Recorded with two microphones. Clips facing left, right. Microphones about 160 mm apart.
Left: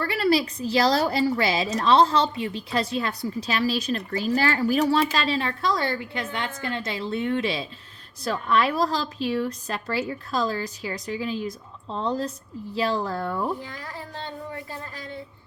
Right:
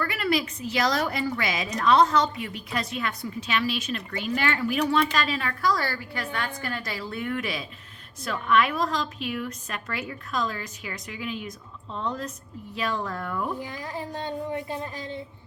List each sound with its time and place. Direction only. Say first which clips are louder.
0.0 s a woman's voice: left 4 dB; 30° left (ahead or behind)
13.6 s speech: right 3 dB; 20° right (ahead or behind)